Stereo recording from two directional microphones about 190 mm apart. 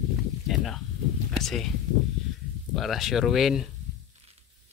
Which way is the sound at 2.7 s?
Centre (ahead or behind).